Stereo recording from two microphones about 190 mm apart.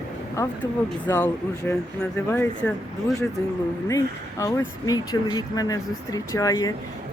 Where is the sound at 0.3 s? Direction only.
10° left (ahead or behind).